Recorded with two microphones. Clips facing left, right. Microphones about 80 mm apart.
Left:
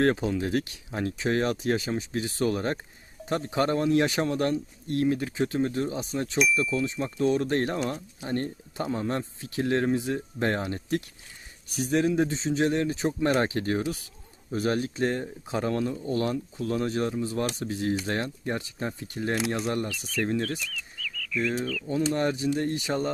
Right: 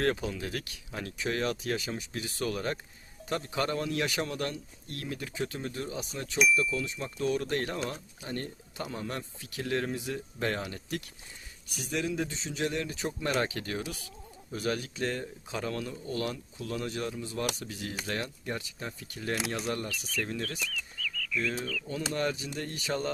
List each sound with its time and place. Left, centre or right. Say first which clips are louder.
0.0 s a man's voice: left 6 dB; left
20.7 s bird: even; centre
21.8 s a man's voice: left 6 dB; left